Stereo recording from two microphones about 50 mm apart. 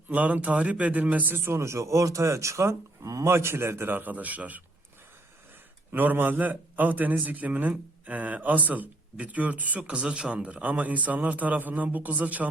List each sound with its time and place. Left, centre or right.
0.1 s a man's voice: right
1.4 s speech: right
5.9 s speech: right